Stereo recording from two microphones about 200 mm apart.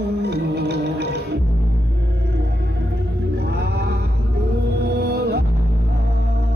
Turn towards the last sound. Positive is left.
turn(degrees=-55)  # may be behind; listen again after turning